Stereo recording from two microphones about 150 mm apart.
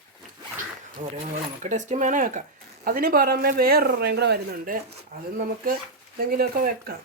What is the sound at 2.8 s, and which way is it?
A man's voice, 75° right (ahead or behind).